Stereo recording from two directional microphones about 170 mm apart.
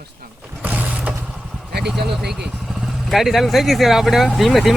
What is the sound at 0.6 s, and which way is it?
Vehicle, 10° right (ahead or behind).